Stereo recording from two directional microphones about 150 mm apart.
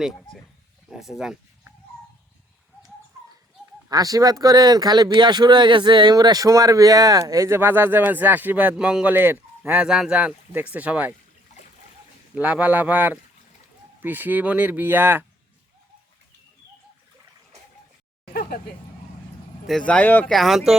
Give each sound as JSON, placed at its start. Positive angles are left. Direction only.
{"t": 0.9, "sound": "speech", "side_deg": 0}
{"t": 3.8, "sound": "speech", "side_deg": -25}
{"t": 12.3, "sound": "speech", "side_deg": -10}
{"t": 19.6, "sound": "speech", "side_deg": 5}